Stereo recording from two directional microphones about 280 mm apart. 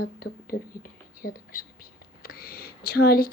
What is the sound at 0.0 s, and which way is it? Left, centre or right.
Speech, left.